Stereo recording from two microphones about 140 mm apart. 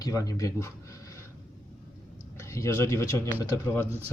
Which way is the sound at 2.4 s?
20° left (ahead or behind).